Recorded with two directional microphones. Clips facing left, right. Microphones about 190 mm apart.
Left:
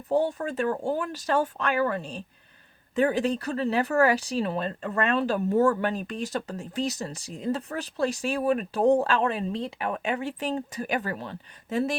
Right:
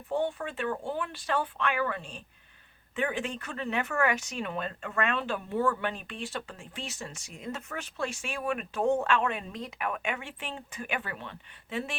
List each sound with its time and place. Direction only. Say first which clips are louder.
0.1 s speech: left 5 dB; 40° left (ahead or behind)